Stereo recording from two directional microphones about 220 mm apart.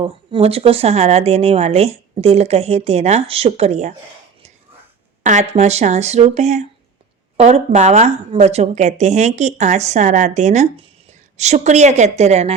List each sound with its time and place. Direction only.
0.0 s speech: 25° right (ahead or behind)
5.2 s speech: 30° right (ahead or behind)